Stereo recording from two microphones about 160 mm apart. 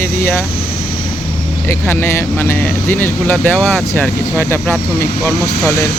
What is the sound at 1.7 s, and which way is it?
Speech, 15° left (ahead or behind).